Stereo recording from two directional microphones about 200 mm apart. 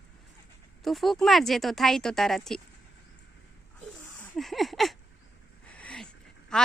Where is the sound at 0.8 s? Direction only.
Centre (ahead or behind).